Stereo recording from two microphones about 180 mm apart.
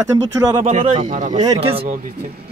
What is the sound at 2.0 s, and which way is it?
Speech, 55° right (ahead or behind).